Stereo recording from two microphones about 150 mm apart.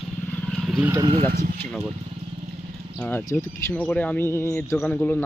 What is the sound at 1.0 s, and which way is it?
Speech, 35° right (ahead or behind).